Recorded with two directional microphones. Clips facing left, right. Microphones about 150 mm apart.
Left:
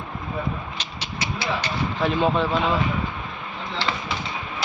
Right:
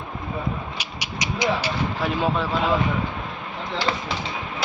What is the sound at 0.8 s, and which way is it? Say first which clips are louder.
Speech: even; 10° right (ahead or behind).